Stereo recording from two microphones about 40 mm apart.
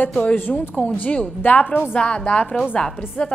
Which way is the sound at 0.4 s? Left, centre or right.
Left.